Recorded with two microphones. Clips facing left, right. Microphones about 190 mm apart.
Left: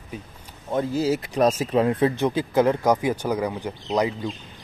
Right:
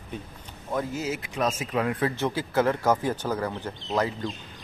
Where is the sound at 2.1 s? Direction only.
15° left (ahead or behind).